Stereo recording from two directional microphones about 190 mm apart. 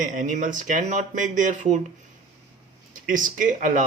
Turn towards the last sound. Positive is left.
turn(degrees=-40)  # may be behind; listen again after turning